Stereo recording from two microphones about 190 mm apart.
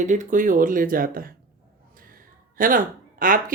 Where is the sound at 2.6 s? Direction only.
45° right (ahead or behind).